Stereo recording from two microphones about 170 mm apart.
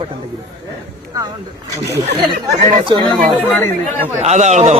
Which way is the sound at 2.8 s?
30° right (ahead or behind).